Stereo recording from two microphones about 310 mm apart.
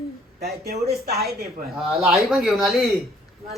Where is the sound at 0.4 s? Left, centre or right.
Right.